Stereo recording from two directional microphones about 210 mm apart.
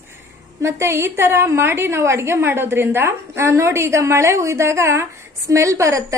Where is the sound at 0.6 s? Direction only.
15° right (ahead or behind).